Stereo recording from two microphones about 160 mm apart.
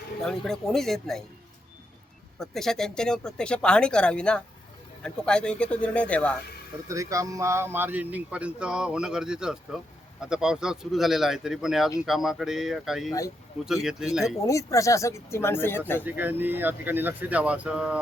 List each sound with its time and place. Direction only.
0.2 s speech: 5° left (ahead or behind)
2.4 s speech: centre (ahead or behind)
6.8 s speech: 20° right (ahead or behind); by 14.3 s 5° right (ahead or behind)
14.4 s speech: 20° left (ahead or behind)
16.0 s speech: 10° right (ahead or behind)